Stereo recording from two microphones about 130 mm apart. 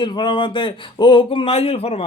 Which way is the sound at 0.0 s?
35° left (ahead or behind).